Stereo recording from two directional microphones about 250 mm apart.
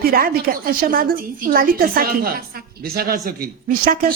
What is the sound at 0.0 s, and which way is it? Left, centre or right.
A man's voice, right.